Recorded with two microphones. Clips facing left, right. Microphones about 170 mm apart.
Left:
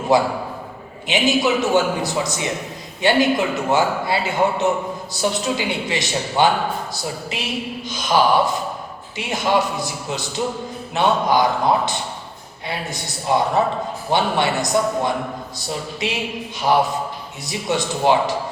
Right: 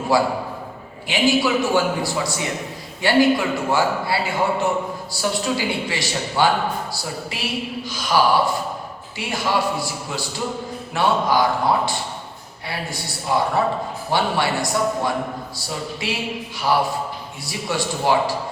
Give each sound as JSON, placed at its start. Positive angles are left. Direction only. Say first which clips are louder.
{"t": 0.1, "sound": "a man's voice", "louder": "left 2 dB", "side_deg": 20}
{"t": 17.4, "sound": "a man's voice", "louder": "left 2 dB", "side_deg": 20}